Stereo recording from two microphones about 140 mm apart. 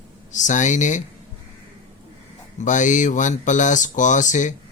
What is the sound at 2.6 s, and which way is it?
Speech, 65° left (ahead or behind).